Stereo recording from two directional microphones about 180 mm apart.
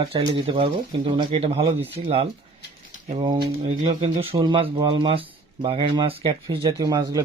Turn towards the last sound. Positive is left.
turn(degrees=-20)  # may be behind; listen again after turning